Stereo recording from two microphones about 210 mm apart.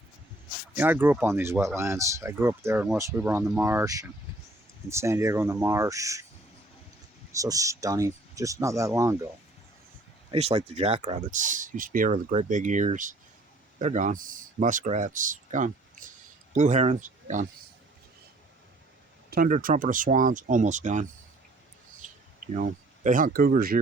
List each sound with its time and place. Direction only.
0.8 s speech: 10° right (ahead or behind)
7.3 s speech: 15° right (ahead or behind)
10.3 s speech: 30° right (ahead or behind)
19.3 s speech: 40° right (ahead or behind)
22.0 s a sound: 35° right (ahead or behind)
22.5 s speech: 35° right (ahead or behind)